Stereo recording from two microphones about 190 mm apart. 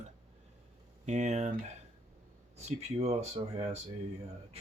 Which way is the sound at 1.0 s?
35° right (ahead or behind).